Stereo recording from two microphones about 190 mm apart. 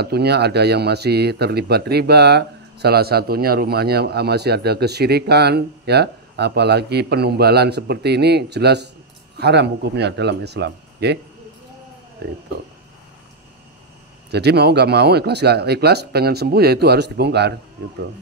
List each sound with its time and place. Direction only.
0.0 s speech: 60° right (ahead or behind)
12.2 s speech: 60° right (ahead or behind)
14.3 s speech: 60° right (ahead or behind)